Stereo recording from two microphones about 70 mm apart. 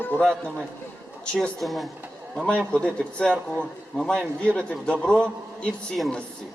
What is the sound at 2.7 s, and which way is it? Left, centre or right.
A man's voice, centre.